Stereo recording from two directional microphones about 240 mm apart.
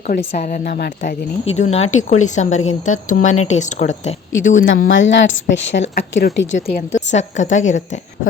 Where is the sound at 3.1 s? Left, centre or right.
Left.